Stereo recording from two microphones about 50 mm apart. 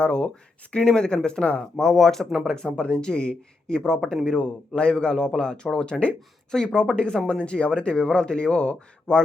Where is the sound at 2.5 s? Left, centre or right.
Centre.